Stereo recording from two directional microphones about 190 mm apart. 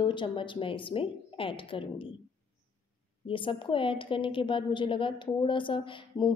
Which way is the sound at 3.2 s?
25° left (ahead or behind).